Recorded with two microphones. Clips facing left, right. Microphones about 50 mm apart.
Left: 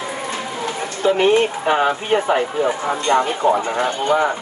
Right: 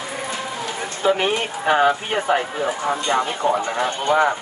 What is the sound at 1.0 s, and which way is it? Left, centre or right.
Speech, centre.